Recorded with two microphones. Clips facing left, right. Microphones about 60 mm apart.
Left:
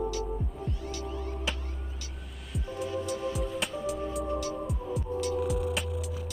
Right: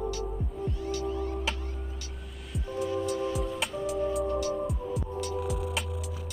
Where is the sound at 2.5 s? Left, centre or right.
Centre.